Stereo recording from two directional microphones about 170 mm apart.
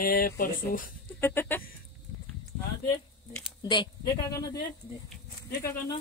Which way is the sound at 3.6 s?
30° left (ahead or behind).